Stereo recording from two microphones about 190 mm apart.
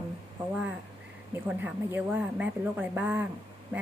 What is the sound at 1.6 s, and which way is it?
A woman's voice, 10° right (ahead or behind).